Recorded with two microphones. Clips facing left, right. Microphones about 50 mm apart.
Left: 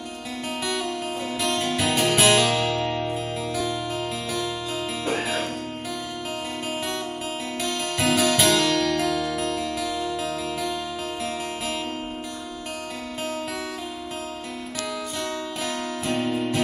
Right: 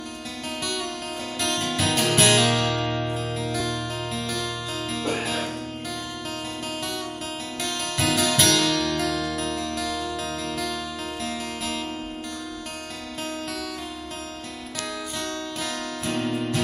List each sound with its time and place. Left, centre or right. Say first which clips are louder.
0.7 s music: left 4 dB; centre
5.0 s harpsichord: left 1 dB; centre
7.6 s harpsichord: left 1 dB; centre
11.2 s music: left 1 dB; centre
14.8 s music: left 1 dB; centre